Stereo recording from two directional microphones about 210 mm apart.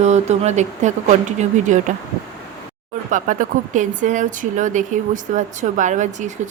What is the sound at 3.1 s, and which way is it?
Speech, 40° right (ahead or behind).